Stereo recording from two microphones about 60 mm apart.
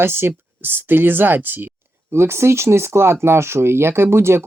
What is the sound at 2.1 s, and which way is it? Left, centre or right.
Speech, right.